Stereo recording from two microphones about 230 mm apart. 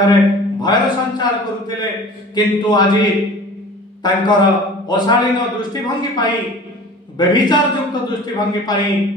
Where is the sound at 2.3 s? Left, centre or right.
Centre.